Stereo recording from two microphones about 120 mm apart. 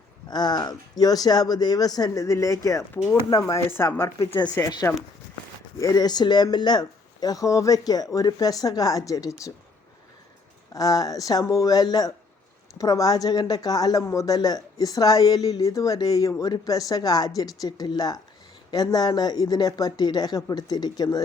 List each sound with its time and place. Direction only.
0.3 s speech: 35° left (ahead or behind); by 3.2 s 20° left (ahead or behind)
3.2 s speech: 30° left (ahead or behind)
5.7 s speech: 30° left (ahead or behind)
10.8 s speech: 30° left (ahead or behind)